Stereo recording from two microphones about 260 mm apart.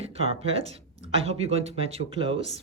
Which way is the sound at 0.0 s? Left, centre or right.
Right.